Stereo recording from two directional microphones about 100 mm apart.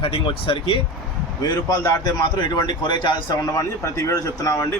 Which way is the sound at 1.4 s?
40° left (ahead or behind).